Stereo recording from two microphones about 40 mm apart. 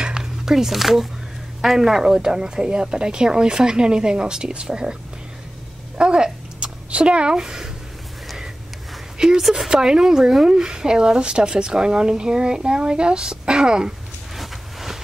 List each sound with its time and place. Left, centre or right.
0.0 s music: centre
1.6 s a woman's voice: centre
5.9 s speech: right
9.4 s speech: centre
9.7 s a woman's voice: centre
14.3 s a sound: centre